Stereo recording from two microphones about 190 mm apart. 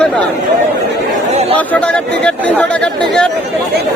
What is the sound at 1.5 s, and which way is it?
Speech, 5° left (ahead or behind).